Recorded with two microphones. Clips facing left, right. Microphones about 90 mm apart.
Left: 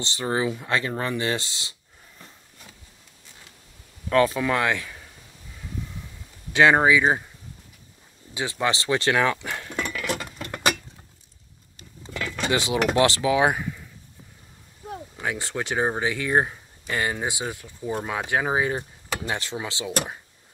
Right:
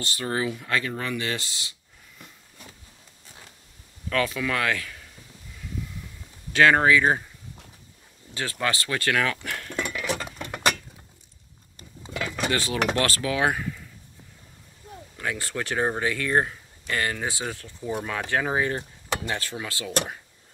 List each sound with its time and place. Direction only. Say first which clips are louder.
0.0 s speech: left 2 dB; 20° left (ahead or behind)
4.1 s speech: left 5 dB; 30° left (ahead or behind)
6.5 s speech: left 1 dB; 20° left (ahead or behind)
8.4 s speech: left 2 dB; 15° left (ahead or behind)
9.8 s cutlery: even; 5° right (ahead or behind)
12.0 s a sound: right 1 dB; 15° right (ahead or behind)
12.4 s mechanisms: left 3 dB; 20° left (ahead or behind)
12.9 s speech: left 5 dB; 20° left (ahead or behind)
15.1 s speech: left 1 dB; 20° left (ahead or behind)